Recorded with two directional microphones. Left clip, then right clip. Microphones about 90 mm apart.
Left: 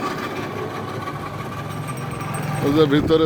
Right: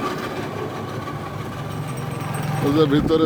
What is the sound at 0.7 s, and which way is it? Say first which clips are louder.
Vehicle: left 1 dB; 45° left (ahead or behind).